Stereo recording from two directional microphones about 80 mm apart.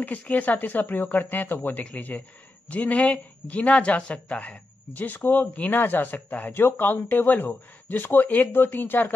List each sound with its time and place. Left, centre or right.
0.0 s speech: centre